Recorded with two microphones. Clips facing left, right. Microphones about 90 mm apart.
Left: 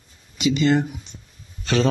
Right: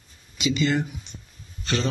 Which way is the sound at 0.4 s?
50° left (ahead or behind).